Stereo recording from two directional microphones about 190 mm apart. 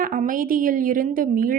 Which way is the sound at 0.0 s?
45° right (ahead or behind).